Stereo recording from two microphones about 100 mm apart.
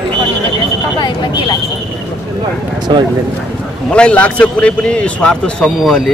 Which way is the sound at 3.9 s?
10° left (ahead or behind).